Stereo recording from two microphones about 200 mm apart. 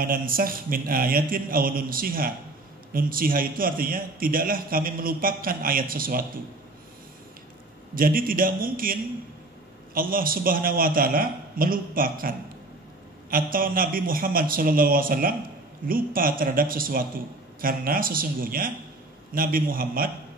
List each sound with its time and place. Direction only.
0.0 s a man's voice: 45° right (ahead or behind)
7.9 s a man's voice: 45° right (ahead or behind)
9.9 s a man's voice: 45° right (ahead or behind)